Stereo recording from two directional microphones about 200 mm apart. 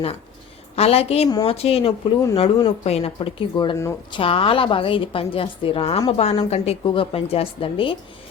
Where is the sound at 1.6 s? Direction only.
30° left (ahead or behind).